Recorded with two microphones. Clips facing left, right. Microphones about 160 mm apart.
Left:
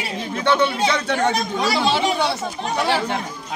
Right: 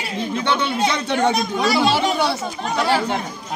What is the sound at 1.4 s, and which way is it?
Speech, centre (ahead or behind).